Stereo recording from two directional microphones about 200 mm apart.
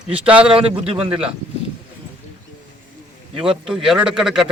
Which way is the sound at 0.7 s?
30° right (ahead or behind).